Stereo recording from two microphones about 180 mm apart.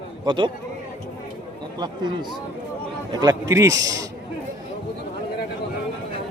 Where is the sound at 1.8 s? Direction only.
25° right (ahead or behind).